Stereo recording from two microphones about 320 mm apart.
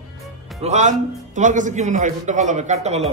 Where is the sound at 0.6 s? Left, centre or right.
Right.